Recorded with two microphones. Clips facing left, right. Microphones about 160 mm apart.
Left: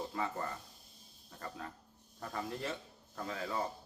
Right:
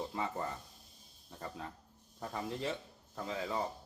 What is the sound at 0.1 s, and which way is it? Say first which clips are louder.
Speech: left 1 dB; 20° right (ahead or behind).